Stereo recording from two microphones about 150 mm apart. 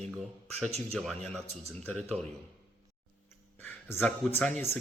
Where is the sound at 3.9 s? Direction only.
10° left (ahead or behind).